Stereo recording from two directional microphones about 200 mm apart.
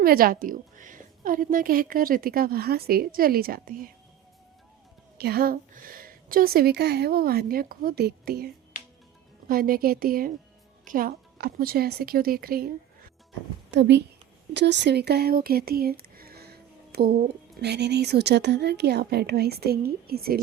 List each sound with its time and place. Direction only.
0.0 s a woman's voice: 45° right (ahead or behind)
5.1 s a woman's voice: 50° right (ahead or behind)
9.5 s a woman's voice: 45° right (ahead or behind)
13.7 s a woman's voice: 60° right (ahead or behind)